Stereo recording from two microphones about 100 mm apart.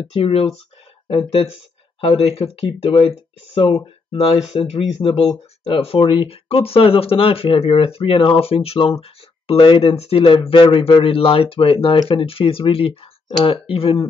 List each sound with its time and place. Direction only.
0.1 s speech: 75° left (ahead or behind)
1.3 s speech: 90° left; by 4.2 s 70° left (ahead or behind)
4.5 s speech: 80° left
9.5 s speech: 65° left (ahead or behind)